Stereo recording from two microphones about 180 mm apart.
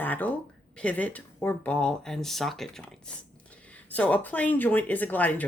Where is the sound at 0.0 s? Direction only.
10° left (ahead or behind).